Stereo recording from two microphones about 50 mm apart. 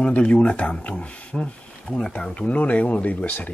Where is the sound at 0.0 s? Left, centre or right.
Left.